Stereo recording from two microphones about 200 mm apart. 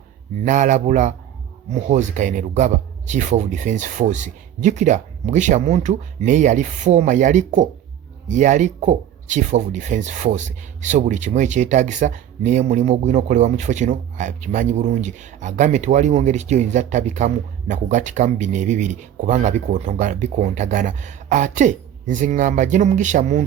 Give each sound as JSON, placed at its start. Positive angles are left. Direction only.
{"t": 0.4, "sound": "speech", "side_deg": -40}